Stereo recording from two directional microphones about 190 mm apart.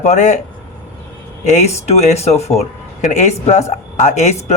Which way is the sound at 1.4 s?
35° left (ahead or behind).